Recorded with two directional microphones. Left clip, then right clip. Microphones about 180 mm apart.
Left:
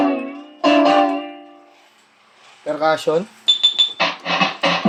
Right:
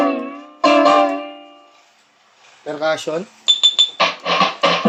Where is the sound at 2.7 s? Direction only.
15° left (ahead or behind).